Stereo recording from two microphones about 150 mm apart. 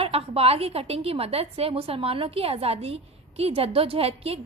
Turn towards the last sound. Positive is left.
turn(degrees=-40)  # may be behind; listen again after turning